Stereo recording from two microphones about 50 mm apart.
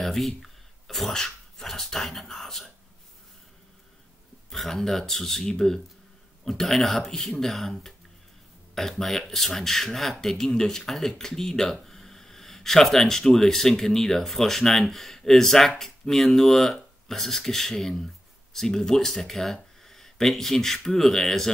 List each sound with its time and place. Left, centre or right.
0.0 s speech: centre
4.5 s speech: centre